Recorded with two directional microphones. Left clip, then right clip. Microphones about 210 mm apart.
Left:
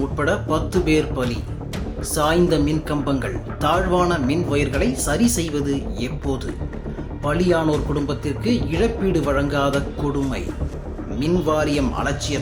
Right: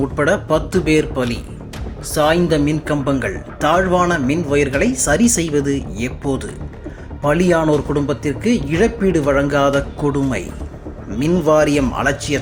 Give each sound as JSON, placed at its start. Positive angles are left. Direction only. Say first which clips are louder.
{"t": 0.2, "sound": "speech", "louder": "right 6 dB", "side_deg": -25}
{"t": 11.2, "sound": "speech", "louder": "right 6 dB", "side_deg": -25}